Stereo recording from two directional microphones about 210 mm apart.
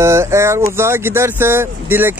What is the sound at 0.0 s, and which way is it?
Speech, 10° right (ahead or behind).